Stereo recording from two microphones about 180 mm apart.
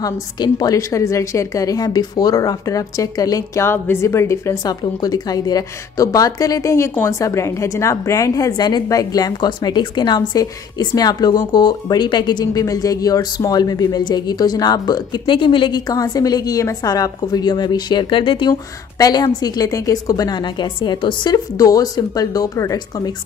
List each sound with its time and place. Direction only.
0.0 s a woman's voice: 20° left (ahead or behind)